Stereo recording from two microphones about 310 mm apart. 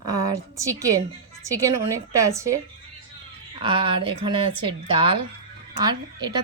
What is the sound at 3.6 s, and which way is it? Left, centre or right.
A woman's voice, centre.